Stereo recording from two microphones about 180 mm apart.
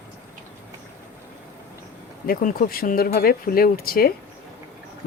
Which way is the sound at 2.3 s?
50° left (ahead or behind).